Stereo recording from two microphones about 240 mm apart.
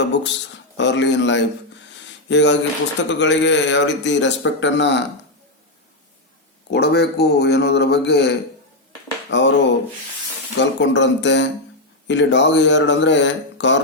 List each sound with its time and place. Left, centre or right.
0.0 s speech: left
6.7 s speech: left
9.3 s speech: left